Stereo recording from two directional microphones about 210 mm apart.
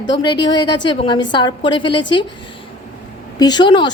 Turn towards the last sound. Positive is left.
turn(degrees=20)  # may be behind; listen again after turning